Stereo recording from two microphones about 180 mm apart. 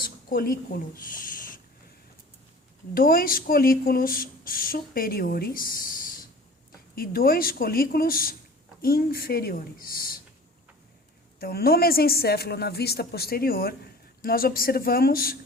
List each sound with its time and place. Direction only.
0.0 s a sound: 55° left (ahead or behind)
2.9 s a woman's voice: 55° left (ahead or behind)
11.3 s a woman's voice: 55° left (ahead or behind)